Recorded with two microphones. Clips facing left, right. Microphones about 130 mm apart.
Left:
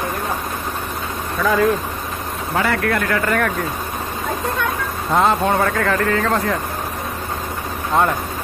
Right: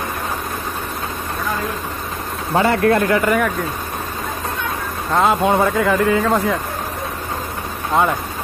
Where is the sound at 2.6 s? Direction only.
25° right (ahead or behind).